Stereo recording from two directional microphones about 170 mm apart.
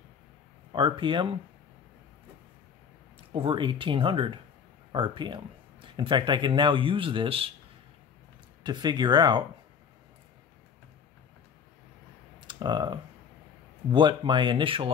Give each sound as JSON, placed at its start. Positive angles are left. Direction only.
{"t": 0.7, "sound": "speech", "side_deg": -30}
{"t": 3.2, "sound": "speech", "side_deg": -30}
{"t": 8.6, "sound": "speech", "side_deg": -25}
{"t": 12.4, "sound": "speech", "side_deg": -25}